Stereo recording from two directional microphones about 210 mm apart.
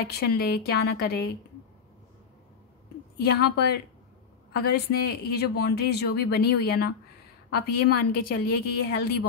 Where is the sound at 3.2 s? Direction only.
50° left (ahead or behind).